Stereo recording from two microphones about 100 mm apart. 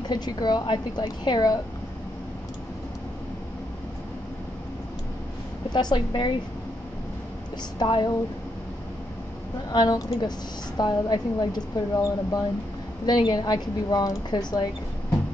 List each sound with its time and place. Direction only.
0.1 s speech: 45° left (ahead or behind)
5.7 s speech: 45° left (ahead or behind)
7.8 s speech: 50° left (ahead or behind)
9.7 s a woman's voice: 40° left (ahead or behind)